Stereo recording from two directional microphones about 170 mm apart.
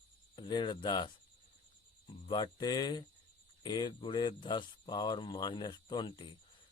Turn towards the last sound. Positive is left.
turn(degrees=25)  # may be behind; listen again after turning